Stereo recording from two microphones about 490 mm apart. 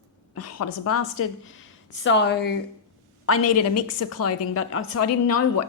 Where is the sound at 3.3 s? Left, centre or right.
Left.